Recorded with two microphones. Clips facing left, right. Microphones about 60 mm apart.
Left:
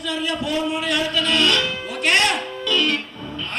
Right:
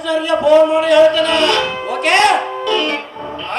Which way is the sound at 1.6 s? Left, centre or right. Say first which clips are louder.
Right 6 dB; centre.